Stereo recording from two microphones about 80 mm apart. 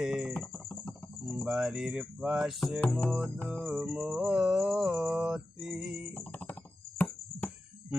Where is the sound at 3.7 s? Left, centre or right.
Centre.